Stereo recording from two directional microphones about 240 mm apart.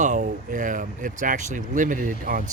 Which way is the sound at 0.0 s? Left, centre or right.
Right.